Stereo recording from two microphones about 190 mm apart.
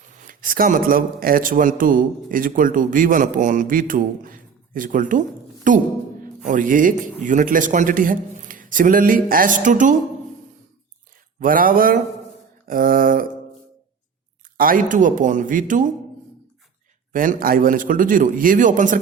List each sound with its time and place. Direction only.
0.3 s a man's voice: 50° right (ahead or behind)
11.3 s a man's voice: 45° right (ahead or behind)
14.6 s a man's voice: 45° right (ahead or behind)
17.1 s a man's voice: 45° right (ahead or behind)